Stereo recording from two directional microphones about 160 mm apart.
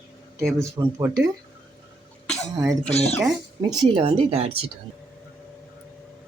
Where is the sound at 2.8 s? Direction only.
40° left (ahead or behind).